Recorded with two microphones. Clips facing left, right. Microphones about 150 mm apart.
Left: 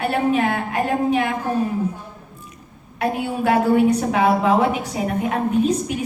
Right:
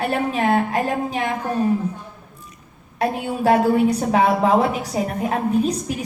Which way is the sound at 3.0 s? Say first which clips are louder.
Right 1 dB; 35° right (ahead or behind).